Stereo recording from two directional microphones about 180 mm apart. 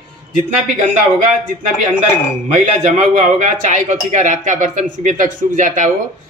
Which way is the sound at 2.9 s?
45° right (ahead or behind).